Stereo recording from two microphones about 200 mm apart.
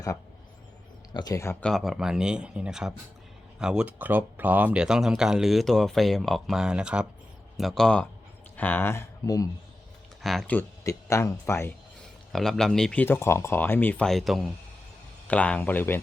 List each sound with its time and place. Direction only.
1.1 s speech: 20° left (ahead or behind)
1.7 s speech: centre (ahead or behind); by 9.5 s 15° left (ahead or behind)
10.2 s speech: 5° left (ahead or behind)
12.3 s speech: centre (ahead or behind)